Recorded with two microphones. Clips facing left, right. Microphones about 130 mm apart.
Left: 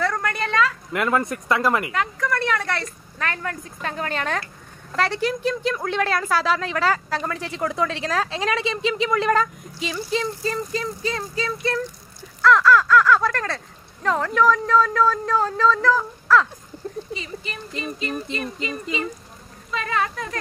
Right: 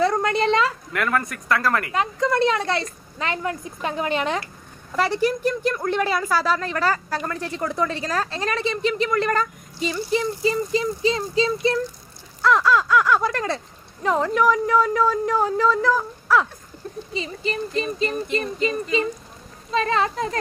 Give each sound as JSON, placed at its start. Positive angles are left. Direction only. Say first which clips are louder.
{"t": 0.0, "sound": "speech", "louder": "right 5 dB", "side_deg": -20}
{"t": 0.9, "sound": "speech", "louder": "left 4 dB", "side_deg": 20}
{"t": 1.9, "sound": "a woman's voice", "louder": "right 2 dB", "side_deg": -20}
{"t": 10.1, "sound": "speech", "louder": "right 3 dB", "side_deg": -10}
{"t": 11.1, "sound": "speech", "louder": "right 8 dB", "side_deg": -20}
{"t": 17.1, "sound": "a sound", "louder": "right 5 dB", "side_deg": -30}
{"t": 19.7, "sound": "a woman's voice", "louder": "right 4 dB", "side_deg": -30}